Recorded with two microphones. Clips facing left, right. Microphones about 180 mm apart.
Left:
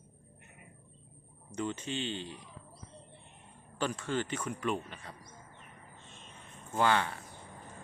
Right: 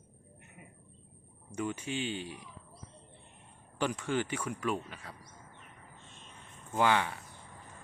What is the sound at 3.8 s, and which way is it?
Speech, 15° right (ahead or behind).